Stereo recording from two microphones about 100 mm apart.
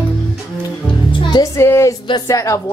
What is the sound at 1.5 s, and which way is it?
A woman's voice, 30° left (ahead or behind).